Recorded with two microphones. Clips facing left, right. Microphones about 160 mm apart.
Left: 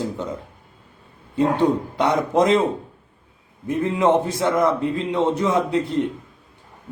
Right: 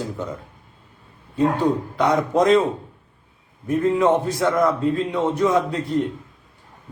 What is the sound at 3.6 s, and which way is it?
A man's voice, 20° left (ahead or behind).